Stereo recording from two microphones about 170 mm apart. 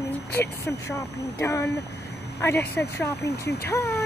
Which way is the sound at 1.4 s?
15° left (ahead or behind).